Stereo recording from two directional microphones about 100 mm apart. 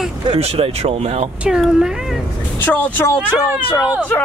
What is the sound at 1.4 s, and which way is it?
Speech, 5° right (ahead or behind).